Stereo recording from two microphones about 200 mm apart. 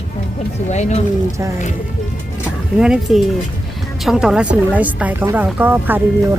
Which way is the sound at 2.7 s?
5° right (ahead or behind).